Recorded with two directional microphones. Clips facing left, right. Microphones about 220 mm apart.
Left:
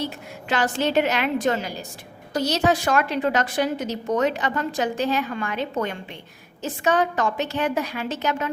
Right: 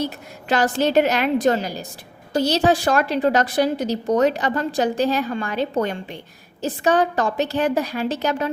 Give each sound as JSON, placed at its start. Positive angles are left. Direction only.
{"t": 0.4, "sound": "a woman's voice", "side_deg": -40}